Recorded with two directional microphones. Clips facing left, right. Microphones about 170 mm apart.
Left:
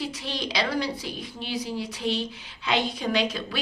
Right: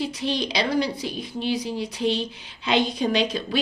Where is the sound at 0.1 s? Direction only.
20° right (ahead or behind).